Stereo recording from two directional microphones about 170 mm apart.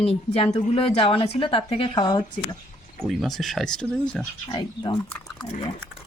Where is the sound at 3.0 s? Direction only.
Centre (ahead or behind).